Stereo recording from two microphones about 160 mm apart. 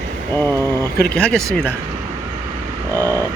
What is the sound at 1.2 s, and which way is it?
Speech, 5° left (ahead or behind).